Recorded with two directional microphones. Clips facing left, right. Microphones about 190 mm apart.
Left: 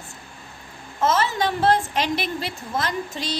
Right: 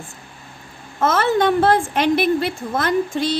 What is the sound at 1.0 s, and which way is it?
A woman's voice, 55° right (ahead or behind).